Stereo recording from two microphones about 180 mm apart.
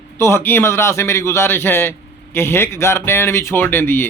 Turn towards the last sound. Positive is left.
turn(degrees=15)  # may be behind; listen again after turning